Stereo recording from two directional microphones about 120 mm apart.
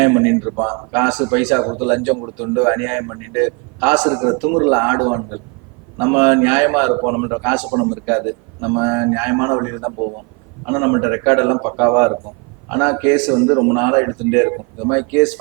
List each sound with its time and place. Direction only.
0.0 s a man's voice: 15° right (ahead or behind)